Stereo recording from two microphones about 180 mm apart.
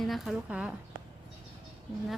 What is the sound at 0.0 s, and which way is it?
Speech, centre (ahead or behind).